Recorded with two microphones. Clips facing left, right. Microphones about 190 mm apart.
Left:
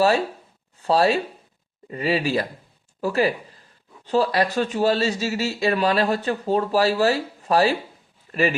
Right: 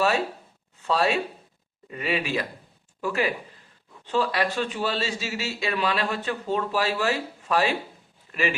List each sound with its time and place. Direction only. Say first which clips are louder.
0.8 s speech: left 5 dB; 35° left (ahead or behind)